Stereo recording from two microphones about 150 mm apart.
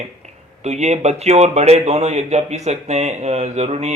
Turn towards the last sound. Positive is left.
turn(degrees=-45)  # may be behind; listen again after turning